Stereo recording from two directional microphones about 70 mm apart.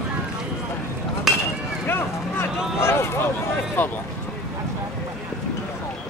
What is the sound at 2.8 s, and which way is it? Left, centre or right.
Speech, left.